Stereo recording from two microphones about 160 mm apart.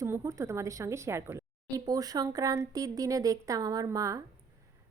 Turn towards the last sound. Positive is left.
turn(degrees=-20)  # may be behind; listen again after turning